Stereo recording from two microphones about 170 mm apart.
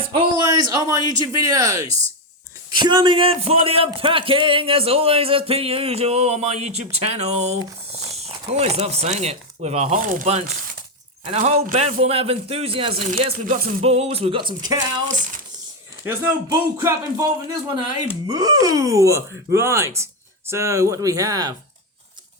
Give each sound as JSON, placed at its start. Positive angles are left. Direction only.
{"t": 0.1, "sound": "a man's voice", "side_deg": -30}
{"t": 14.6, "sound": "a man's voice", "side_deg": -20}
{"t": 15.0, "sound": "speech", "side_deg": -45}
{"t": 16.0, "sound": "a man's voice", "side_deg": -15}